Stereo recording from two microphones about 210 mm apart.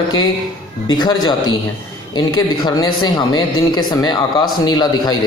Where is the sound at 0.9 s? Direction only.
20° left (ahead or behind).